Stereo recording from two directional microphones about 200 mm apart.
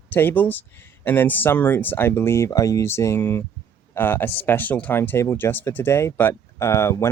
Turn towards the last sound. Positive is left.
turn(degrees=15)  # may be behind; listen again after turning